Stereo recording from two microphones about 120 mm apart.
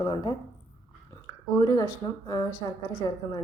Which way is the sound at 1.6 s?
30° left (ahead or behind).